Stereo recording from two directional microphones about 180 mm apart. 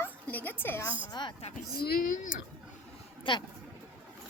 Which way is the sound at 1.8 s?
60° left (ahead or behind).